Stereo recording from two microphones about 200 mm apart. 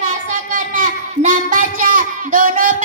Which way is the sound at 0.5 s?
40° right (ahead or behind).